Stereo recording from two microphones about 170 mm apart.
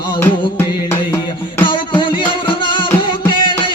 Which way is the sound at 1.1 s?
25° left (ahead or behind).